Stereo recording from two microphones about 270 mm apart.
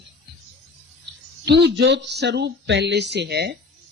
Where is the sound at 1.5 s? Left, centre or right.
Right.